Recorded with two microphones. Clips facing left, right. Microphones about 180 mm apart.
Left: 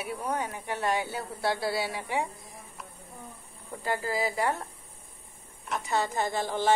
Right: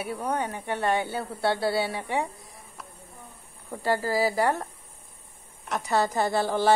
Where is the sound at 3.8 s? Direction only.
35° right (ahead or behind).